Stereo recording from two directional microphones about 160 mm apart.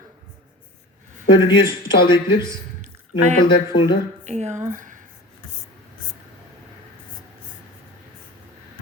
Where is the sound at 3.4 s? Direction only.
30° left (ahead or behind).